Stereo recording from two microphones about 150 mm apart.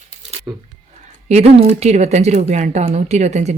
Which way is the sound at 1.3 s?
45° right (ahead or behind).